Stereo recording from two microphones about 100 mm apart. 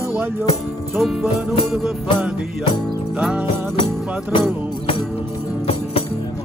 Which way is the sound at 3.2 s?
10° right (ahead or behind).